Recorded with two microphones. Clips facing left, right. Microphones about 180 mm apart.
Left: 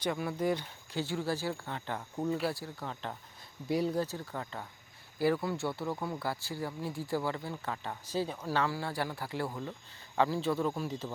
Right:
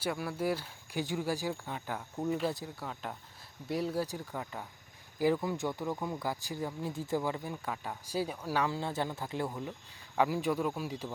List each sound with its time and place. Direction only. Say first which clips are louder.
0.0 s speech: left 1 dB; 5° right (ahead or behind)
2.5 s speech: even; 15° right (ahead or behind); by 4.0 s centre (ahead or behind)
4.0 s speech: even; 15° right (ahead or behind)